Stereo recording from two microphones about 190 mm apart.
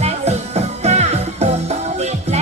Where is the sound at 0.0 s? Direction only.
35° right (ahead or behind).